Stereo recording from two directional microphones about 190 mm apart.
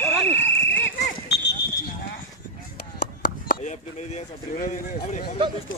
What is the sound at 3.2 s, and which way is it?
Chop, 50° left (ahead or behind).